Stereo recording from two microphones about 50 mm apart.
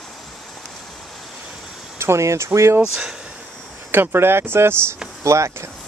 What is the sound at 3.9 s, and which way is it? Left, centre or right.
Speech, right.